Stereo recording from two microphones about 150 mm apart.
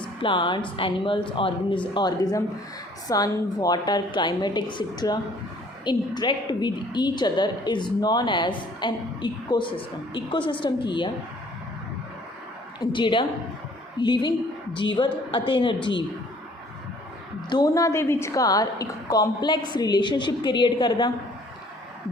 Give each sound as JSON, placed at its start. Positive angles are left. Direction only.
{"t": 0.2, "sound": "a woman's voice", "side_deg": 30}
{"t": 12.8, "sound": "a woman's voice", "side_deg": 35}
{"t": 17.5, "sound": "a woman's voice", "side_deg": 25}